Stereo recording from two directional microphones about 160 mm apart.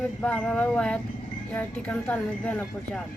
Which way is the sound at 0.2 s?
5° left (ahead or behind).